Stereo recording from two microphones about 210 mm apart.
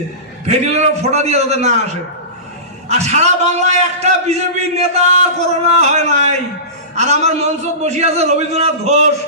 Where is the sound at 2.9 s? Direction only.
30° right (ahead or behind).